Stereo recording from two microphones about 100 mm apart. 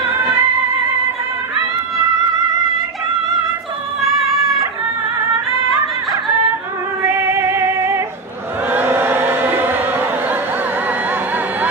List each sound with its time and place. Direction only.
0.0 s music: 20° right (ahead or behind)
7.6 s female singing: 30° right (ahead or behind)
8.7 s chant: 20° right (ahead or behind)